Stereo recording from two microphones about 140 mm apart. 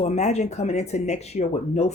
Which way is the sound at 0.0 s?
55° left (ahead or behind).